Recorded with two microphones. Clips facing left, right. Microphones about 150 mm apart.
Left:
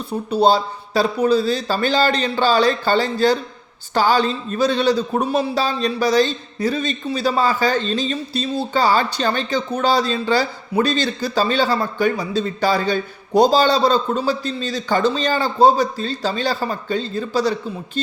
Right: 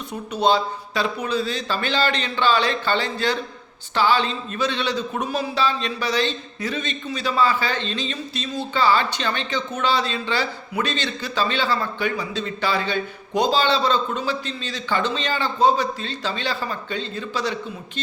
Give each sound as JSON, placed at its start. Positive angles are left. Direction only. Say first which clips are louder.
{"t": 0.1, "sound": "a man's voice", "louder": "left 4 dB", "side_deg": 35}